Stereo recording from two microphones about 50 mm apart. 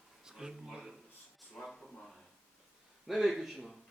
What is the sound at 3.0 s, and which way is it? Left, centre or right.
Speech, centre.